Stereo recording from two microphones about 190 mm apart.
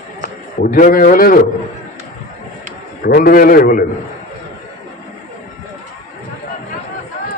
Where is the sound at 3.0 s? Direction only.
50° left (ahead or behind).